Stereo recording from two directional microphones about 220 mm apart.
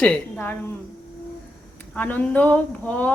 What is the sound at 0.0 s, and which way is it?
Speech, 5° left (ahead or behind).